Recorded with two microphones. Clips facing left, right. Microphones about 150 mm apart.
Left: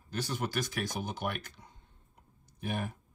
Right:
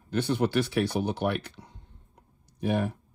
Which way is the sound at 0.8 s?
65° right (ahead or behind).